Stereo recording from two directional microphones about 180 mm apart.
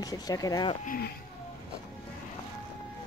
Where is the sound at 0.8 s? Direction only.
55° left (ahead or behind).